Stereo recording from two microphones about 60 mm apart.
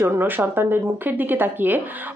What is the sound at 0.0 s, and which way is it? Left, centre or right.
A woman's voice, right.